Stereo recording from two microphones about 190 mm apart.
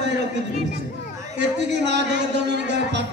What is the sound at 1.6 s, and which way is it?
A man's voice, 65° right (ahead or behind).